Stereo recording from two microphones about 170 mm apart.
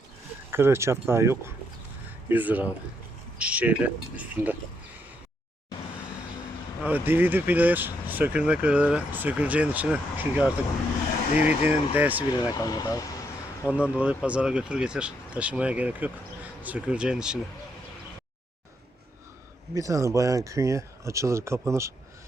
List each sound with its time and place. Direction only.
0.5 s speech: 15° right (ahead or behind)
6.8 s speech: 10° right (ahead or behind)
11.3 s speech: 40° left (ahead or behind)
11.9 s speech: 10° right (ahead or behind)
12.3 s speech: 25° left (ahead or behind)
13.9 s speech: 5° right (ahead or behind)
19.7 s speech: 20° right (ahead or behind)